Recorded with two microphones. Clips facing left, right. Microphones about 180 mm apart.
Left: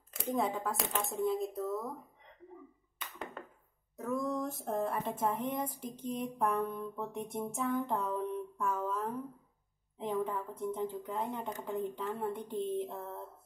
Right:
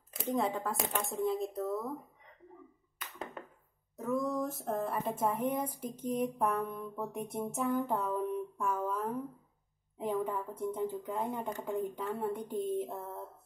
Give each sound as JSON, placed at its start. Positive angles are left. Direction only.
{"t": 0.1, "sound": "speech", "side_deg": 0}
{"t": 0.7, "sound": "speech", "side_deg": -20}
{"t": 1.1, "sound": "speech", "side_deg": 0}
{"t": 3.9, "sound": "speech", "side_deg": 0}
{"t": 7.3, "sound": "a sound", "side_deg": -5}
{"t": 9.9, "sound": "speech", "side_deg": -10}